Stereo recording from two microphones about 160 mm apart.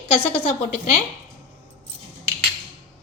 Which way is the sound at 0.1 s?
35° left (ahead or behind).